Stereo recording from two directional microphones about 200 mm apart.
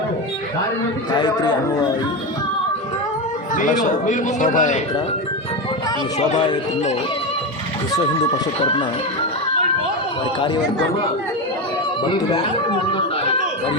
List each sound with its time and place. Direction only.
1.1 s a man's voice: 20° left (ahead or behind)
3.5 s speech: 40° left (ahead or behind)
6.1 s speech: 35° left (ahead or behind)
12.0 s a man's voice: 20° left (ahead or behind)